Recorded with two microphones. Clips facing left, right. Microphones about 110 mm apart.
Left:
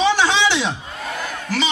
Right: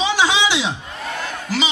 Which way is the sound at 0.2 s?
15° right (ahead or behind).